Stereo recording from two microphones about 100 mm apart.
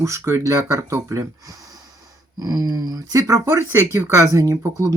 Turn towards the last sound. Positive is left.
turn(degrees=-35)  # may be behind; listen again after turning